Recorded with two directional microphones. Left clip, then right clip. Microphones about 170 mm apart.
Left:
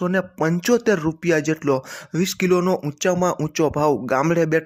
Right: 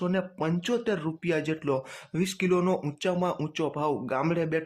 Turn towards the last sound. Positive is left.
turn(degrees=35)  # may be behind; listen again after turning